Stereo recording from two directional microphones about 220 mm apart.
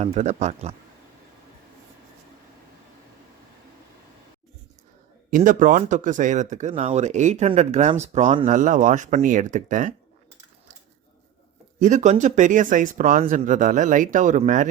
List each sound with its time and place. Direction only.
0.0 s speech: 30° right (ahead or behind)
5.3 s speech: 35° right (ahead or behind)
11.8 s speech: 35° right (ahead or behind)